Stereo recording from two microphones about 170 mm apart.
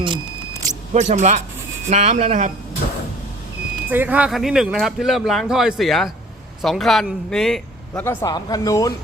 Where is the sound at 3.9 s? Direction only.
10° right (ahead or behind).